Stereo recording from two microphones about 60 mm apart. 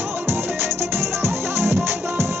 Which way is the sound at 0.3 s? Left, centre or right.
Right.